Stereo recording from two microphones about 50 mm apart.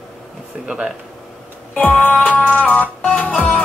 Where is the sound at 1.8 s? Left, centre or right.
Left.